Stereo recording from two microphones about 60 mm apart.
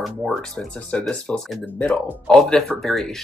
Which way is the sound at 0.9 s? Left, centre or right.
Centre.